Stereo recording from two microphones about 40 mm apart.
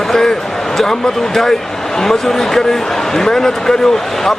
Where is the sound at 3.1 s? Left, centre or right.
Centre.